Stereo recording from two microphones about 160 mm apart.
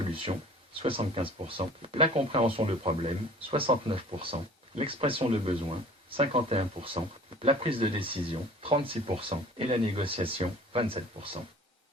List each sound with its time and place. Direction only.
0.8 s speech: 35° right (ahead or behind)